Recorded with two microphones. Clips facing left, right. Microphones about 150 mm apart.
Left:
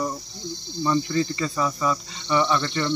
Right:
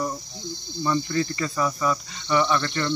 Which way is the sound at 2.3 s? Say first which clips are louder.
Even; 10° left (ahead or behind).